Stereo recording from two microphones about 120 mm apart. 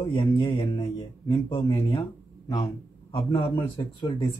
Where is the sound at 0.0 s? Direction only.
40° left (ahead or behind).